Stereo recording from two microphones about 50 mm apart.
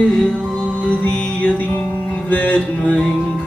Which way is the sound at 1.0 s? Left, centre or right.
Left.